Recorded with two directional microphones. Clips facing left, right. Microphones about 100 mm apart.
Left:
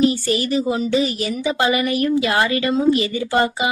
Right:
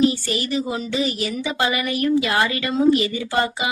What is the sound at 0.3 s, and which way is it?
A woman's voice, 35° left (ahead or behind).